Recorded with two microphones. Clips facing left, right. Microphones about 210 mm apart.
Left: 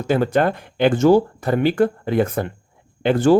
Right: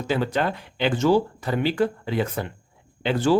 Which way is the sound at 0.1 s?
50° left (ahead or behind).